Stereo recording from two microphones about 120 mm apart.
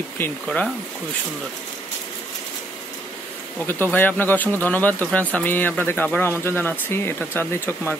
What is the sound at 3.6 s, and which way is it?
Speech, 15° left (ahead or behind).